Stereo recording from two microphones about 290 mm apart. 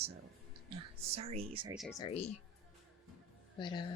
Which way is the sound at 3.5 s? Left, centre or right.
Centre.